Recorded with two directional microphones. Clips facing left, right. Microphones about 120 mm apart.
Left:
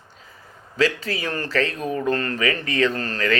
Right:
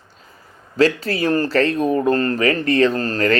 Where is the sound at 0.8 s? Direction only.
40° right (ahead or behind).